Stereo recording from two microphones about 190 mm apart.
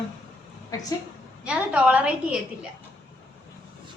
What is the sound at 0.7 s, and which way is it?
Speech, 20° left (ahead or behind).